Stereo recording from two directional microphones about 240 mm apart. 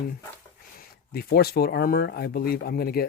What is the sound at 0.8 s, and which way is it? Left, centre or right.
Speech, left.